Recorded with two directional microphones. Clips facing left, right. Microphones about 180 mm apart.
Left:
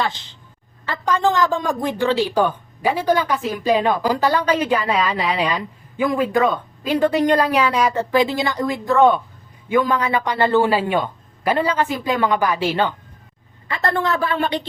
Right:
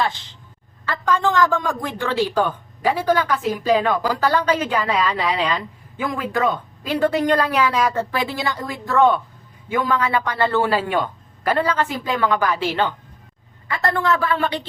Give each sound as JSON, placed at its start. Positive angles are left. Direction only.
{"t": 0.9, "sound": "a woman's voice", "side_deg": 15}